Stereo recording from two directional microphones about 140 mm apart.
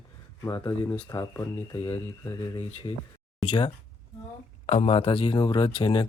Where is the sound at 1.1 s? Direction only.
25° left (ahead or behind).